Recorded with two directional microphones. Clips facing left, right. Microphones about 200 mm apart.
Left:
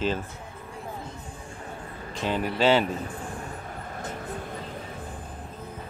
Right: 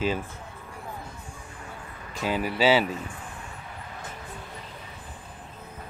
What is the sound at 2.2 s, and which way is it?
Speech, 5° right (ahead or behind).